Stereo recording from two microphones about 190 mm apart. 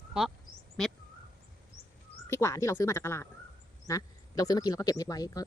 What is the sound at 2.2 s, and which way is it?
Speech, 15° left (ahead or behind).